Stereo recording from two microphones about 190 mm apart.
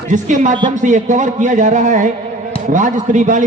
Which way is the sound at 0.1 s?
40° right (ahead or behind).